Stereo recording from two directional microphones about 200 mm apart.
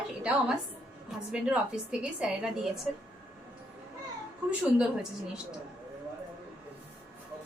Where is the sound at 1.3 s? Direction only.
5° right (ahead or behind).